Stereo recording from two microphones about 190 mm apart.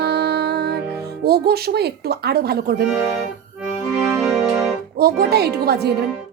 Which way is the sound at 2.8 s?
5° right (ahead or behind).